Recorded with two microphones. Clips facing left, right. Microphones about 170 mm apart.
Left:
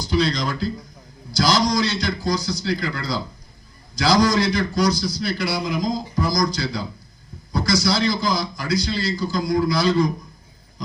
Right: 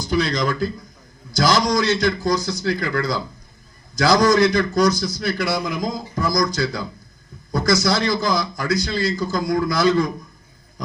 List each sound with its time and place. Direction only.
0.0 s a man's voice: 50° right (ahead or behind)